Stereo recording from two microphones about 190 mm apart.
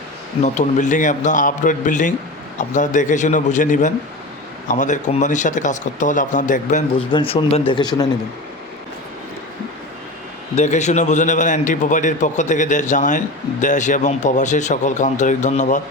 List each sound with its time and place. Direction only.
0.4 s a man's voice: 40° left (ahead or behind)
7.1 s speech: 30° left (ahead or behind)
10.5 s a man's voice: 35° left (ahead or behind)